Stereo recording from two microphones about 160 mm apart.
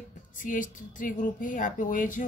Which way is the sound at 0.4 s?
55° left (ahead or behind).